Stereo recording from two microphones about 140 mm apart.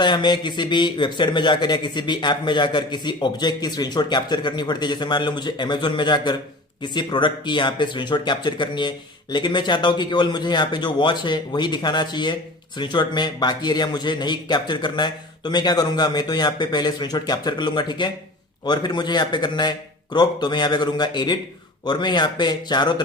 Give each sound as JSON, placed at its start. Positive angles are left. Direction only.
{"t": 0.0, "sound": "a man's voice", "side_deg": 30}